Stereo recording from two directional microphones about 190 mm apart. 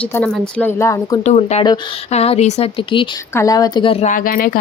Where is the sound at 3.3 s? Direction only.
20° left (ahead or behind); by 4.5 s 50° left (ahead or behind).